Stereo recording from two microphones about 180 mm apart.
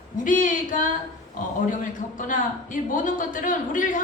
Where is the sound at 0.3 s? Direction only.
45° left (ahead or behind).